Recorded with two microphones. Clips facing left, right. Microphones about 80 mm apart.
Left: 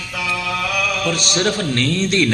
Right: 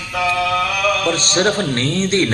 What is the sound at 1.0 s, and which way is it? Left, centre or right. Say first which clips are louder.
A man's voice: right 2 dB; right.